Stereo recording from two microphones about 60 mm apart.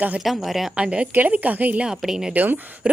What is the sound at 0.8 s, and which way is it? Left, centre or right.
Speech, centre.